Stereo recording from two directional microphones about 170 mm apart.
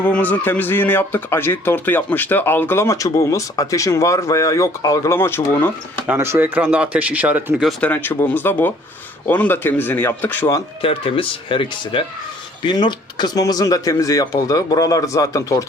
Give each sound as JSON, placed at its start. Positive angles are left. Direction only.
{"t": 0.0, "sound": "a man's voice", "side_deg": 10}
{"t": 6.1, "sound": "speech", "side_deg": -15}
{"t": 7.7, "sound": "a man's voice", "side_deg": 10}
{"t": 10.8, "sound": "speech", "side_deg": 30}